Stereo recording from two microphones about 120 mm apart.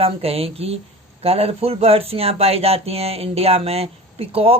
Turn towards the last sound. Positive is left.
turn(degrees=-55)  # may be behind; listen again after turning